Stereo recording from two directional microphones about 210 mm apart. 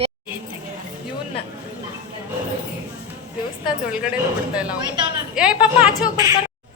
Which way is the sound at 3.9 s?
5° right (ahead or behind).